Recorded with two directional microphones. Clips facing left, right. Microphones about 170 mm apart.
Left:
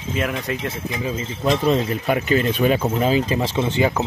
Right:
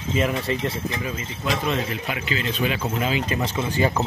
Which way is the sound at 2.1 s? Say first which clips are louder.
Left 8 dB; 45° left (ahead or behind).